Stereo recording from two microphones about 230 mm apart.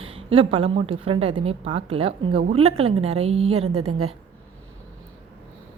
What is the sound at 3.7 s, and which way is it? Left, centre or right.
Speech, right.